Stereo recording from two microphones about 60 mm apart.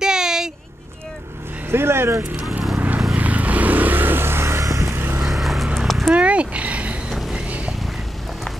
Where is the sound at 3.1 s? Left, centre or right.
Right.